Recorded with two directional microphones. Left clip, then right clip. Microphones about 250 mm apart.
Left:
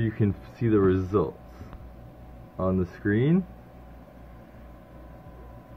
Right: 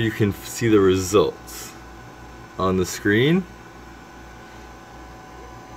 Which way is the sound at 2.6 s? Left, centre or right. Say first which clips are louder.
Right 7 dB; centre.